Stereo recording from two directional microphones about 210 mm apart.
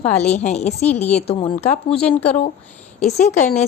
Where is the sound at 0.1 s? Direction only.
35° left (ahead or behind).